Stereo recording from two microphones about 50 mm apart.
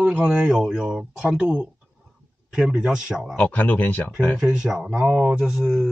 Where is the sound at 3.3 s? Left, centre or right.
Left.